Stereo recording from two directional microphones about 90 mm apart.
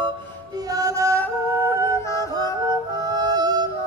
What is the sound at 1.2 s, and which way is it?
Yodeling, 30° left (ahead or behind).